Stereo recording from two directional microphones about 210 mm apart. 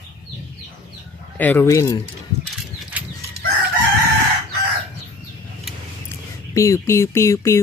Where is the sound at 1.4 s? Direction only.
10° left (ahead or behind).